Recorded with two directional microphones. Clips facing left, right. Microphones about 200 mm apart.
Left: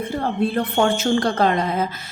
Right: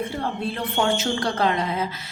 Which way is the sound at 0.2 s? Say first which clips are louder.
Left 6 dB; 50° left (ahead or behind).